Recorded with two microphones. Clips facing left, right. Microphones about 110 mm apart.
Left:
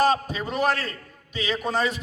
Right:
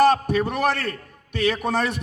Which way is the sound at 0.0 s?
65° right (ahead or behind).